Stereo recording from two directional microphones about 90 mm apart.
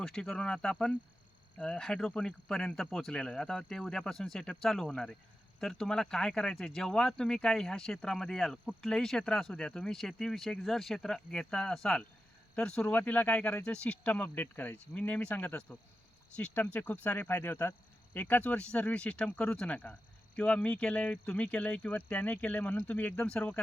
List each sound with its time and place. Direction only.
0.0 s speech: 5° left (ahead or behind)